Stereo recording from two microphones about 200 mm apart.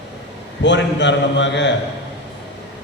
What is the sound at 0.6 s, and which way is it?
A man's voice, 60° left (ahead or behind).